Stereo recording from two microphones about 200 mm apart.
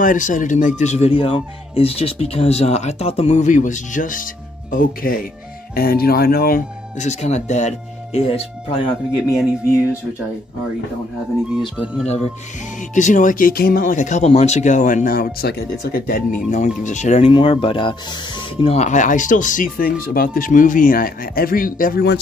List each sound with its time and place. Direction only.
0.0 s speech: 40° left (ahead or behind)
12.9 s speech: 40° left (ahead or behind)